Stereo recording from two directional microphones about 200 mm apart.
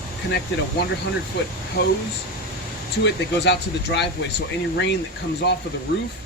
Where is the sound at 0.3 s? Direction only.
55° left (ahead or behind).